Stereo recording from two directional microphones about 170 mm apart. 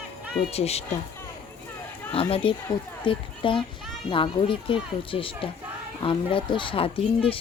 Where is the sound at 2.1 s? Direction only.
35° left (ahead or behind).